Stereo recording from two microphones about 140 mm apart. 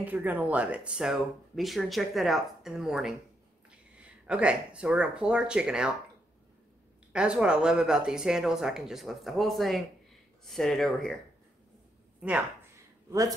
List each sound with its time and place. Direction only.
0.0 s speech: 10° right (ahead or behind)
7.1 s speech: 5° right (ahead or behind)
12.2 s speech: 10° right (ahead or behind)